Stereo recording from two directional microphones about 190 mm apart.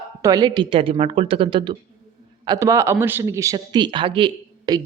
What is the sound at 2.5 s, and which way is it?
Speech, 15° right (ahead or behind).